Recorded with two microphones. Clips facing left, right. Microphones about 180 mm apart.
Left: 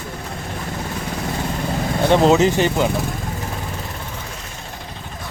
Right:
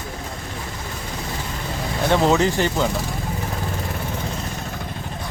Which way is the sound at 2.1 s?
20° left (ahead or behind).